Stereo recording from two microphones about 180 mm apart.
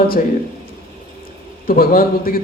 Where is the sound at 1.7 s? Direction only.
55° left (ahead or behind).